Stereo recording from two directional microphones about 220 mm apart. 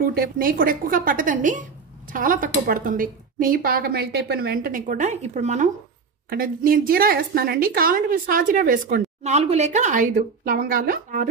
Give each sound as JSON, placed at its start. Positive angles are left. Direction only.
{"t": 0.0, "sound": "a woman's voice", "side_deg": -45}